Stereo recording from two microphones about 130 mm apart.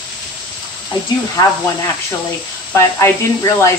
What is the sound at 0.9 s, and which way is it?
Speech, 35° left (ahead or behind).